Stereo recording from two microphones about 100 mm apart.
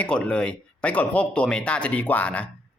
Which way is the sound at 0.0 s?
10° left (ahead or behind).